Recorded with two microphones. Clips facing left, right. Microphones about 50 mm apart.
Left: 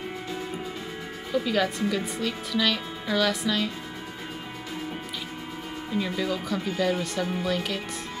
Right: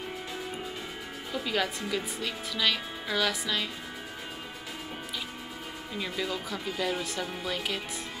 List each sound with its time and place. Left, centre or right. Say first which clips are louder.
1.3 s speech: left 5 dB; centre
6.1 s speech: left 5 dB; centre